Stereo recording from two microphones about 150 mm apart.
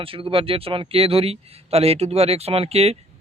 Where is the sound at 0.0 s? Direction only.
35° right (ahead or behind).